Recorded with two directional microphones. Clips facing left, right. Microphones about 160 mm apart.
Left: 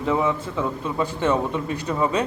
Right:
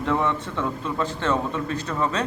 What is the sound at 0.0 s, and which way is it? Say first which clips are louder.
A man's voice: left 2 dB; 5° left (ahead or behind).